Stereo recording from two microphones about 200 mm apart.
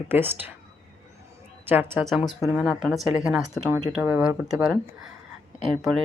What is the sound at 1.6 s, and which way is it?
A woman's voice, 10° right (ahead or behind).